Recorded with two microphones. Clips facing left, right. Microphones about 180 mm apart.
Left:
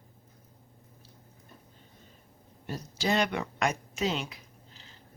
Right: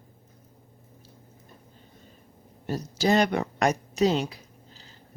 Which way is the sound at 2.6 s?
40° right (ahead or behind).